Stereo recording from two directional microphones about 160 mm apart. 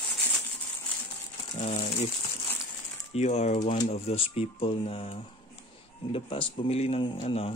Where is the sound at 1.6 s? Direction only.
40° left (ahead or behind).